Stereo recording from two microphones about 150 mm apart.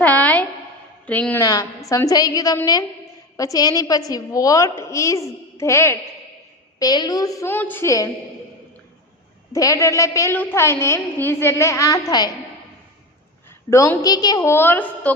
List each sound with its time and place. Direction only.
0.0 s a sound: 10° left (ahead or behind)
1.0 s a woman's voice: 10° left (ahead or behind)
1.4 s a woman's voice: 25° left (ahead or behind)
9.5 s a woman's voice: 20° left (ahead or behind)
13.7 s a woman's voice: 20° left (ahead or behind)